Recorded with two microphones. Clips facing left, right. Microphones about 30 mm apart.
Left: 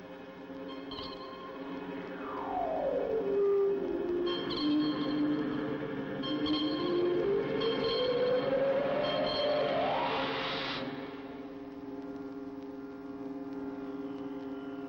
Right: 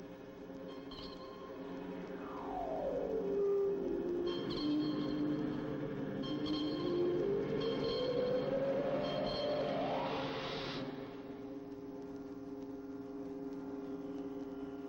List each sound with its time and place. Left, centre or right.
2.4 s music: left